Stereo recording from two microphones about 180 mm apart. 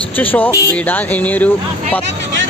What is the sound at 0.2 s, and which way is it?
Music, 10° left (ahead or behind).